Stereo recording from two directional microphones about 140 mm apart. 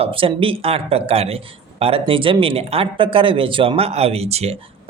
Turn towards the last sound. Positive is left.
turn(degrees=-50)  # may be behind; listen again after turning